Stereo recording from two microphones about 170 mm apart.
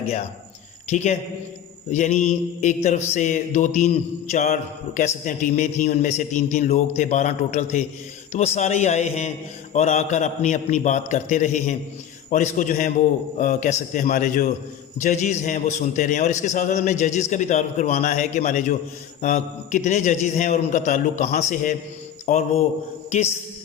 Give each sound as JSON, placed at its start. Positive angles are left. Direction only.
{"t": 0.9, "sound": "a man's voice", "side_deg": 40}